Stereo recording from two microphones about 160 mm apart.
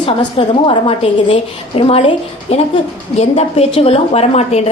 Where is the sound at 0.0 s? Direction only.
30° left (ahead or behind).